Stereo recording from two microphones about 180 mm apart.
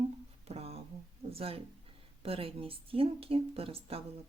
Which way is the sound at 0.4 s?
35° right (ahead or behind).